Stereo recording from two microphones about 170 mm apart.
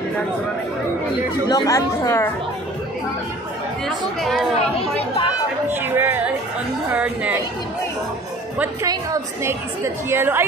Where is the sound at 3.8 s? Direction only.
Centre (ahead or behind).